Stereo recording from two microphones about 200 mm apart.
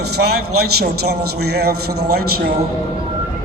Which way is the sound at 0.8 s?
55° right (ahead or behind).